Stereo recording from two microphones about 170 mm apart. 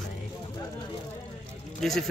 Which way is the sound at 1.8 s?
Centre (ahead or behind).